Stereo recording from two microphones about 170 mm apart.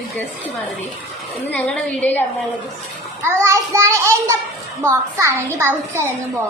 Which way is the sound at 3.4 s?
15° right (ahead or behind).